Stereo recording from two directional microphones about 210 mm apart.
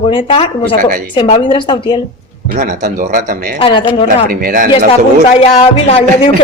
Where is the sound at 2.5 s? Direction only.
40° right (ahead or behind).